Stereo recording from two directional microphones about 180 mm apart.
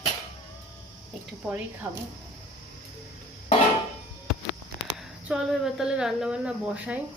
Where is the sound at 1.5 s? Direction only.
10° right (ahead or behind).